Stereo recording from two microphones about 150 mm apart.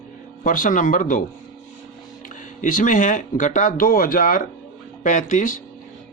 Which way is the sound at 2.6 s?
60° left (ahead or behind).